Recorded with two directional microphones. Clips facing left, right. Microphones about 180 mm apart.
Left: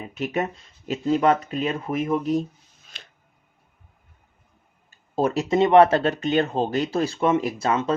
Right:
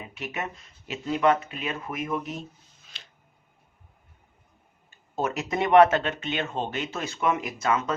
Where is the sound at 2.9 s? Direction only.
50° left (ahead or behind).